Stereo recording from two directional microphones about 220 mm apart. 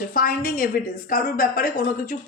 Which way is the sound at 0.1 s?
40° left (ahead or behind).